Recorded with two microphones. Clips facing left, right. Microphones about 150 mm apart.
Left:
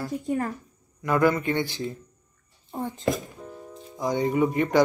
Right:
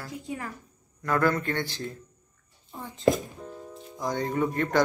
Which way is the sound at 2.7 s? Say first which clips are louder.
Left 9 dB; 50° left (ahead or behind).